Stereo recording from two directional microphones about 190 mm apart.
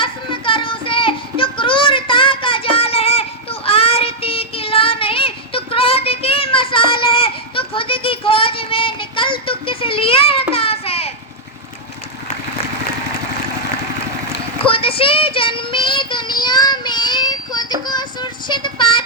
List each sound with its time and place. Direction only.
0.0 s child singing: 25° left (ahead or behind)
10.5 s a sound: 30° left (ahead or behind)
14.7 s child singing: 30° left (ahead or behind)